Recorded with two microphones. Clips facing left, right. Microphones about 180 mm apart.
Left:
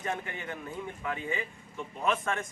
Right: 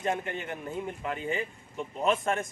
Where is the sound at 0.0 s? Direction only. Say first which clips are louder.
Right 4 dB; 25° right (ahead or behind).